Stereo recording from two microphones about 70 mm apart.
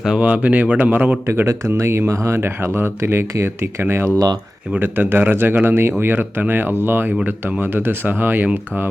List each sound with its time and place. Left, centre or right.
0.2 s speech: right
1.3 s speech: right